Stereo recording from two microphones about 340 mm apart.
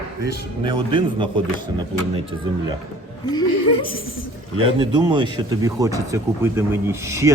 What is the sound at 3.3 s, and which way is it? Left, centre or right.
Speech, centre.